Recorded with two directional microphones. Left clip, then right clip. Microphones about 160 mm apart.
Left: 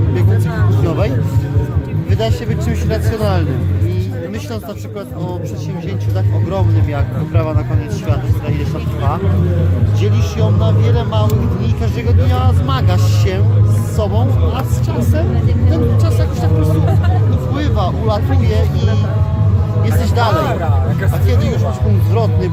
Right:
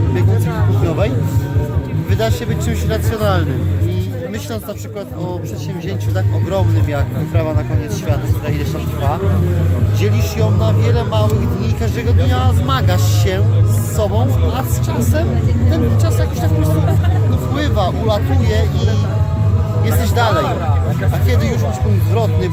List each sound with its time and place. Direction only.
0.9 s music: 5° right (ahead or behind)
2.1 s speech: 15° right (ahead or behind)
6.5 s speech: 20° right (ahead or behind)
10.0 s speech: 25° right (ahead or behind)
17.5 s speech: 20° right (ahead or behind)
20.0 s speech: 15° right (ahead or behind)